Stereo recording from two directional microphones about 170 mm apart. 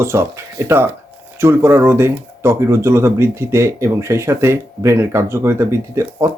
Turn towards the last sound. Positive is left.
turn(degrees=-15)  # may be behind; listen again after turning